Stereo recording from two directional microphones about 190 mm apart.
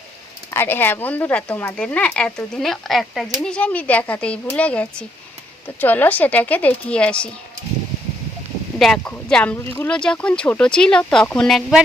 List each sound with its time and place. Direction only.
0.5 s speech: 10° left (ahead or behind)
8.8 s speech: 5° left (ahead or behind)